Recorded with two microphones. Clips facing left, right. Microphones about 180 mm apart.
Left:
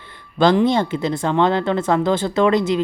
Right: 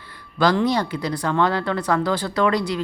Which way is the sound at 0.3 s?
25° left (ahead or behind).